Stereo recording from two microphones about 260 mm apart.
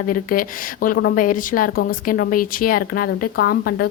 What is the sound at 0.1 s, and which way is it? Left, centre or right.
A woman's voice, left.